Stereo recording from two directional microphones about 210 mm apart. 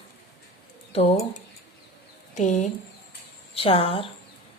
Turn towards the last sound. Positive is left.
turn(degrees=25)  # may be behind; listen again after turning